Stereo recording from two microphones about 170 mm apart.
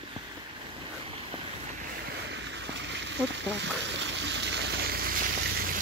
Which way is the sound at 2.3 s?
90° right.